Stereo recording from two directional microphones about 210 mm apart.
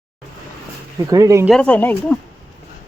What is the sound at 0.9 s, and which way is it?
Speech, 15° right (ahead or behind).